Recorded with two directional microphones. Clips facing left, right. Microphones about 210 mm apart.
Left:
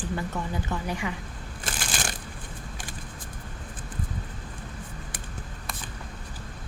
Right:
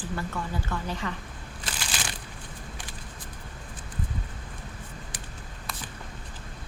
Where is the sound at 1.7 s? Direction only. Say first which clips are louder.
Left 3 dB; 50° left (ahead or behind).